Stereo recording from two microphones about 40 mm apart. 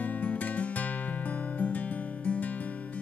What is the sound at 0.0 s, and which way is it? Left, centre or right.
Music, left.